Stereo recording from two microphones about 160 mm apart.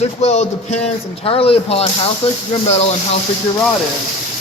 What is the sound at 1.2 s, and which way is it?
Speech, 35° left (ahead or behind).